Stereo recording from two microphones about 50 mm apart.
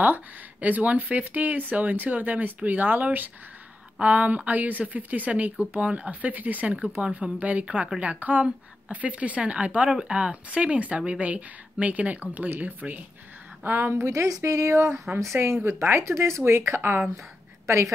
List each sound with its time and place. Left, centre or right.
0.0 s speech: right
6.7 s speech: right
13.7 s speech: right
15.4 s speech: right
15.8 s speech: right